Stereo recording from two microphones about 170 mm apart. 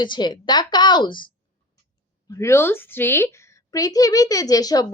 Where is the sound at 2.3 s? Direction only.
15° left (ahead or behind).